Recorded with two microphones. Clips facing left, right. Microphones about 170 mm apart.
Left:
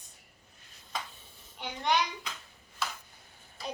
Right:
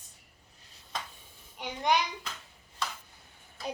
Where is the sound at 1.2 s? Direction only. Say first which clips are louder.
Right 1 dB; 10° right (ahead or behind).